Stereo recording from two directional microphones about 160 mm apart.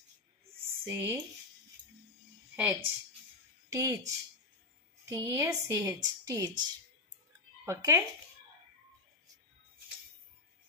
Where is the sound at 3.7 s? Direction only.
20° right (ahead or behind).